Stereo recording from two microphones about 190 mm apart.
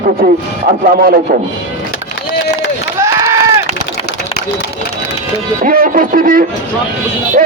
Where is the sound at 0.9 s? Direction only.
50° right (ahead or behind).